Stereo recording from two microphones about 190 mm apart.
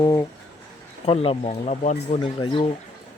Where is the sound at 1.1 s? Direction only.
30° left (ahead or behind).